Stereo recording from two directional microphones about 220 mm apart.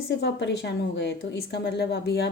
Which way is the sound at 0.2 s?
55° left (ahead or behind).